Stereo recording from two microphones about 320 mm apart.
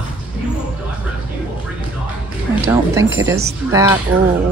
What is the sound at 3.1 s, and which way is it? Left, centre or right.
Speech, centre.